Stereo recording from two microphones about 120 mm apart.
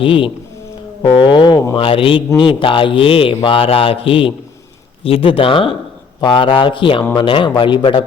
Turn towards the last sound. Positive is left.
turn(degrees=45)  # may be behind; listen again after turning